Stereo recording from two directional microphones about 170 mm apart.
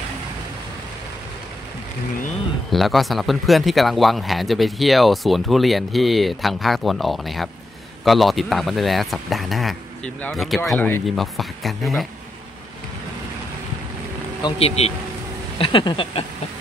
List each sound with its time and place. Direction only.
2.7 s speech: centre (ahead or behind)
14.4 s speech: 35° left (ahead or behind)
15.6 s a sound: 30° left (ahead or behind)